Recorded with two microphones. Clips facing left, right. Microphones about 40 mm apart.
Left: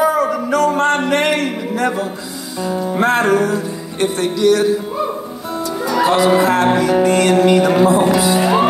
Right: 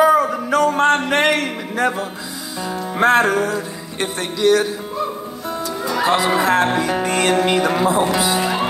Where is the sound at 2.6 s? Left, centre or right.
Centre.